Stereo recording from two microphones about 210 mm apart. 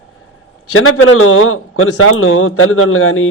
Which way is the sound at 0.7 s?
75° left (ahead or behind).